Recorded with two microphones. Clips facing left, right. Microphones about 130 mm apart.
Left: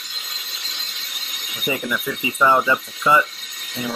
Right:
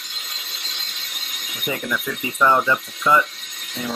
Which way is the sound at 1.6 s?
5° left (ahead or behind).